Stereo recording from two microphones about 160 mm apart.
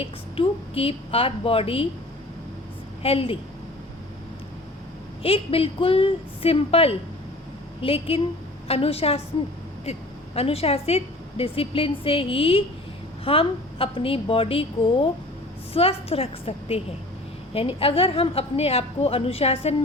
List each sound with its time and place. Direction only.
0.0 s a woman's voice: 35° left (ahead or behind)
3.0 s a woman's voice: 35° left (ahead or behind)
5.2 s a woman's voice: 35° left (ahead or behind)
10.3 s a woman's voice: 40° left (ahead or behind)
15.7 s a woman's voice: 35° left (ahead or behind)